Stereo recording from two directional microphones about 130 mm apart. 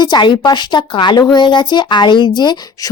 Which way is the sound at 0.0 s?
35° left (ahead or behind).